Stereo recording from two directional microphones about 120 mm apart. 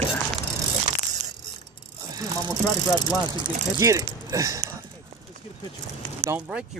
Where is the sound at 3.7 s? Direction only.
30° right (ahead or behind).